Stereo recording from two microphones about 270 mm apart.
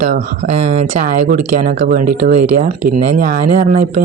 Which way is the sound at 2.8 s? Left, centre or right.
Right.